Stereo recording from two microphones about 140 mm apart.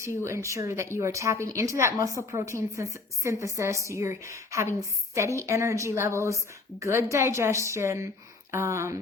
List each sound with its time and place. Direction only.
0.2 s a woman's voice: 20° right (ahead or behind)